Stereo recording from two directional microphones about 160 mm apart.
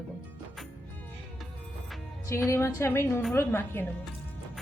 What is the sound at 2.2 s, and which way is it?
A woman's voice, 20° left (ahead or behind).